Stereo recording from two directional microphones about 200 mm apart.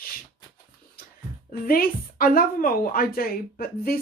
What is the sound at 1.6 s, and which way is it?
A woman's voice, 45° left (ahead or behind).